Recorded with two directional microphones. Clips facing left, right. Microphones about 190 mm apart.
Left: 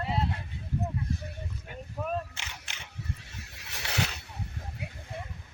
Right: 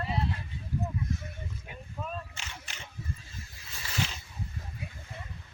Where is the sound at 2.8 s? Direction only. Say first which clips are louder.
Left 1 dB; 75° left (ahead or behind).